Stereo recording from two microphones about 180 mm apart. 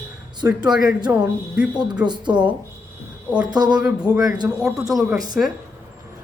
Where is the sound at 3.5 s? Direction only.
20° right (ahead or behind).